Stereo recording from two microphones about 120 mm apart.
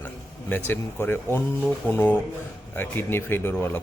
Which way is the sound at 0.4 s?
15° left (ahead or behind).